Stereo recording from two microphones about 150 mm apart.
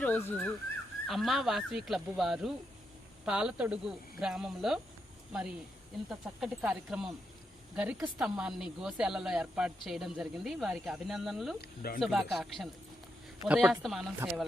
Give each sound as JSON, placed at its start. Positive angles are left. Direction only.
{"t": 0.0, "sound": "speech", "side_deg": 10}
{"t": 1.0, "sound": "speech", "side_deg": 0}
{"t": 11.6, "sound": "speech", "side_deg": 80}
{"t": 11.9, "sound": "speech", "side_deg": 0}